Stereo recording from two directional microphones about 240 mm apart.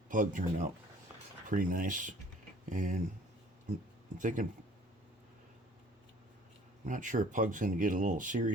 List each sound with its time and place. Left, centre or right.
0.1 s speech: right
4.2 s speech: right
6.8 s speech: right